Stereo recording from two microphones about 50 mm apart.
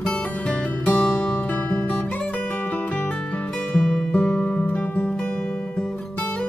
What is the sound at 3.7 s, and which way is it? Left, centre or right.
Music, left.